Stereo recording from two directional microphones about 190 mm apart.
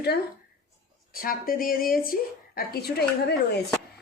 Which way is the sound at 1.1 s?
50° left (ahead or behind).